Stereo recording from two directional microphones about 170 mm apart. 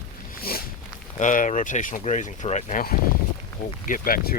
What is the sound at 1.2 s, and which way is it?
Speech, 50° left (ahead or behind).